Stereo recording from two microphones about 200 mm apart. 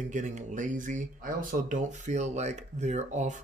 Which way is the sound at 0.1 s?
35° right (ahead or behind).